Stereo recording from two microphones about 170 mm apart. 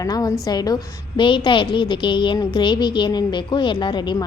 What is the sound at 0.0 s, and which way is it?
A woman's voice, 20° left (ahead or behind).